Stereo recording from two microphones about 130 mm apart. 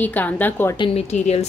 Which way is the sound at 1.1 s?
60° left (ahead or behind).